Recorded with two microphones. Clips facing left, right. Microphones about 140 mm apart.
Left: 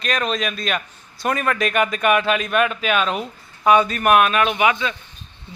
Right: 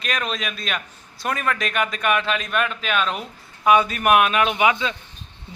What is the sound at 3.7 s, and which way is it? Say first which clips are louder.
Speech: left 1 dB; 5° right (ahead or behind).